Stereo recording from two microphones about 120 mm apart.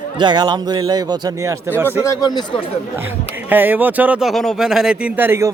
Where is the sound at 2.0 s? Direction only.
25° left (ahead or behind).